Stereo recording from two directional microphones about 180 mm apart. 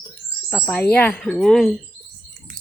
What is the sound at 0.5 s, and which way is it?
Speech, 10° left (ahead or behind).